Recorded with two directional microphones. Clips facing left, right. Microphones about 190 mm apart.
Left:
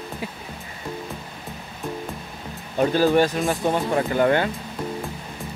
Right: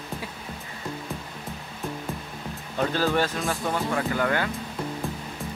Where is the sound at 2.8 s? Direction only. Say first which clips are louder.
Left 6 dB; 15° left (ahead or behind).